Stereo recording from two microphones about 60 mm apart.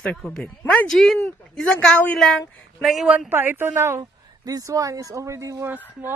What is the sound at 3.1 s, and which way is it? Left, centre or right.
Speech, right.